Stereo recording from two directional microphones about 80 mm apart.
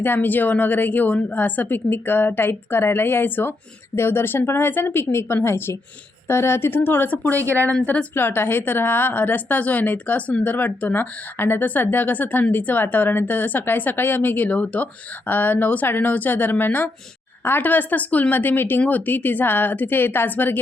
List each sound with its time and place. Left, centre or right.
0.0 s a woman's voice: left